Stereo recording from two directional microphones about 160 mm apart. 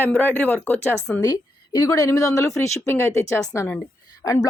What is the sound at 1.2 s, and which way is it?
A woman's voice, 25° left (ahead or behind).